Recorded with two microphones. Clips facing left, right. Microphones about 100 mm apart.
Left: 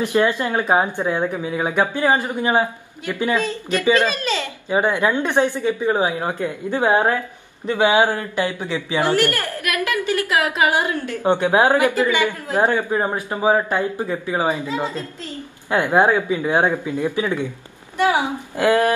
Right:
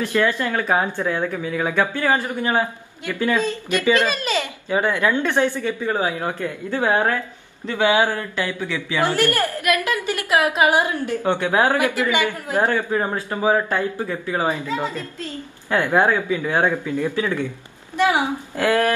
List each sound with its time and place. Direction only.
0.0 s speech: 20° left (ahead or behind)
4.2 s a child's voice: 15° right (ahead or behind)
4.6 s speech: 20° left (ahead or behind)
9.9 s a woman's voice: 20° right (ahead or behind)
11.2 s a man's voice: 20° left (ahead or behind)